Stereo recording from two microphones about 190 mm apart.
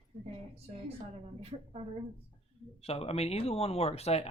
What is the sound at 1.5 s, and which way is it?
Speech, 30° right (ahead or behind).